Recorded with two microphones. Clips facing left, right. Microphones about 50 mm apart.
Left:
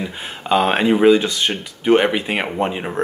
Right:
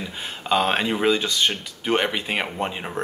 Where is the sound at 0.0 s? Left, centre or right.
Centre.